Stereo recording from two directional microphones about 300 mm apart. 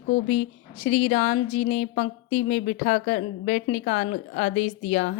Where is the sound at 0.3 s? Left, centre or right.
Left.